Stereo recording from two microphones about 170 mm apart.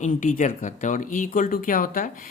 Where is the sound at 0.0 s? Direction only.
50° left (ahead or behind).